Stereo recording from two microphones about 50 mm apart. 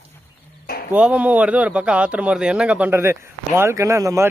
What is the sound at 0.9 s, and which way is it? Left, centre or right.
Speech, right.